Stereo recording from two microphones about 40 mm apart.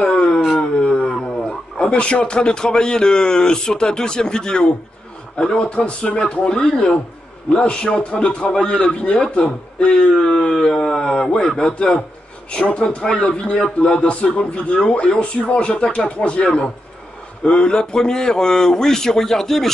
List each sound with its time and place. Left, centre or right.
0.0 s a sound: left
1.5 s a man's voice: left
5.8 s speech: left
6.1 s speech: left